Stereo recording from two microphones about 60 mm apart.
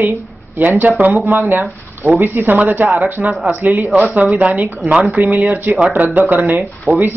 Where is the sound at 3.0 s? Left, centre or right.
Centre.